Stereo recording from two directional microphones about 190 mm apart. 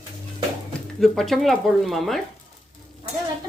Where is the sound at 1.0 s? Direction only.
Centre (ahead or behind).